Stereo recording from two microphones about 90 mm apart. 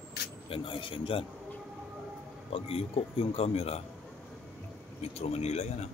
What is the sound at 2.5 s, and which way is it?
Speech, 90° left.